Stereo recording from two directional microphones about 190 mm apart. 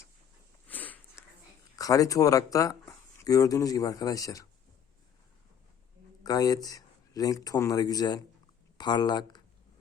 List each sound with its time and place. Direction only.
0.7 s sniff: 10° left (ahead or behind)
1.7 s speech: 20° left (ahead or behind)
6.2 s speech: 20° left (ahead or behind)